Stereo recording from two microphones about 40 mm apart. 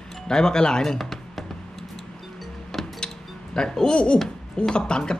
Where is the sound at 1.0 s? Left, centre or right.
Centre.